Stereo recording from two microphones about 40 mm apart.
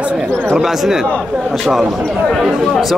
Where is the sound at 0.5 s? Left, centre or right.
Centre.